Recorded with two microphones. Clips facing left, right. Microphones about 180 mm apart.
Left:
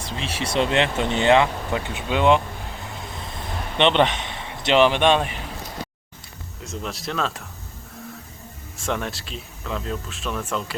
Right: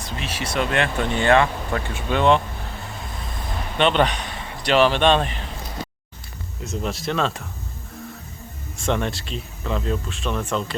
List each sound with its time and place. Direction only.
0.0 s speech: 30° left (ahead or behind)
3.8 s a man's voice: 20° left (ahead or behind)
6.7 s speech: centre (ahead or behind)
8.8 s speech: centre (ahead or behind)